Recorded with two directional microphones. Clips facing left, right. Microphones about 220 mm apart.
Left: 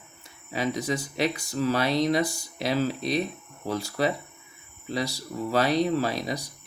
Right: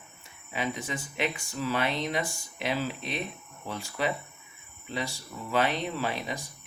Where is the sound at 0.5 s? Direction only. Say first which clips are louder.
Left 5 dB; 40° left (ahead or behind).